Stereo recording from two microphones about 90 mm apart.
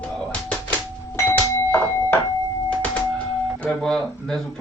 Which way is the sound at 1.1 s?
25° left (ahead or behind).